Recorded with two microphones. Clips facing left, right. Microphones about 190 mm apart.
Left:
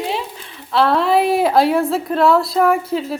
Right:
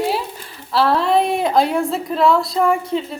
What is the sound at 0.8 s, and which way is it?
A woman's voice, centre (ahead or behind).